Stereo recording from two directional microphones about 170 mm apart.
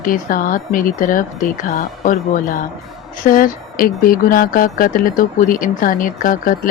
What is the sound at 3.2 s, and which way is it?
Speech, 55° left (ahead or behind).